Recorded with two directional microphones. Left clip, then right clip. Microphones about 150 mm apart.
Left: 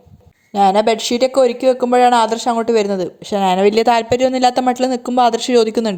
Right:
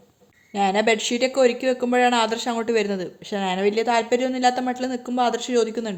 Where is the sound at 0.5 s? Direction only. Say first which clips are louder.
Left 7 dB; 30° left (ahead or behind).